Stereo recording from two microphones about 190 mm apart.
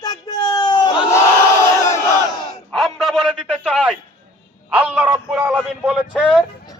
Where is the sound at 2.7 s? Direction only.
Centre (ahead or behind).